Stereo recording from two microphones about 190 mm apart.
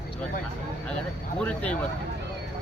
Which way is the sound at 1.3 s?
5° left (ahead or behind).